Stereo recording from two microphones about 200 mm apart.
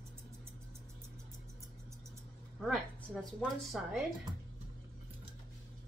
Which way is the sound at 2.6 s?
Centre (ahead or behind).